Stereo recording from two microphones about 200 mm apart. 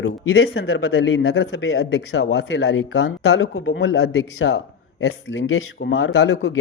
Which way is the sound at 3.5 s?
60° left (ahead or behind).